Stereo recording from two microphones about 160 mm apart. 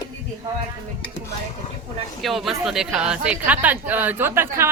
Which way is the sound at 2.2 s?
Centre (ahead or behind).